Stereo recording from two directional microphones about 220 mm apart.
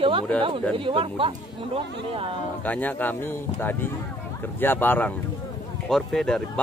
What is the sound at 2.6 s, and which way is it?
Speech, 5° left (ahead or behind).